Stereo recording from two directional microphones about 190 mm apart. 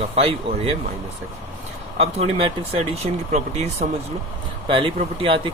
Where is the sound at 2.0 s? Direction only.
30° right (ahead or behind).